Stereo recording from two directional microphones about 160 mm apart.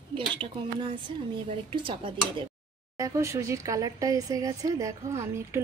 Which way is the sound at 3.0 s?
20° right (ahead or behind).